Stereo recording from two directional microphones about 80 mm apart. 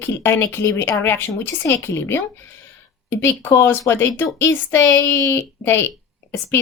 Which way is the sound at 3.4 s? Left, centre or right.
Left.